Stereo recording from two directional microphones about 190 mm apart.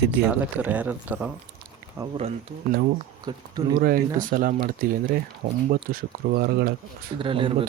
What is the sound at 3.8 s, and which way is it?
Speech, 50° right (ahead or behind).